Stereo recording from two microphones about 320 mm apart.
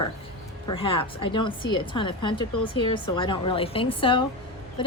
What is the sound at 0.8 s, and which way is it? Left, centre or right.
Speech, centre.